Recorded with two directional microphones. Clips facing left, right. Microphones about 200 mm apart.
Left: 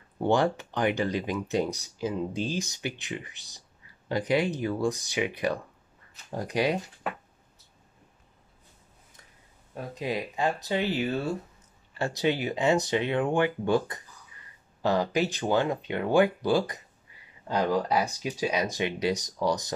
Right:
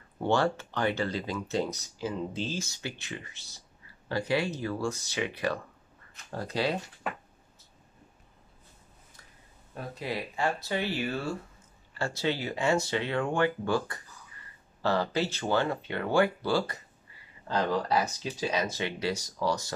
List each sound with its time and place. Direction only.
0.2 s speech: 15° left (ahead or behind)
9.8 s speech: 15° left (ahead or behind)